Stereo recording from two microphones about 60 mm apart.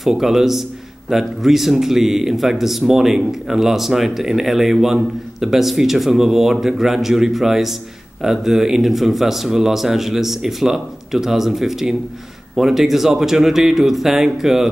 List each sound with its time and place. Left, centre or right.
0.0 s speech: centre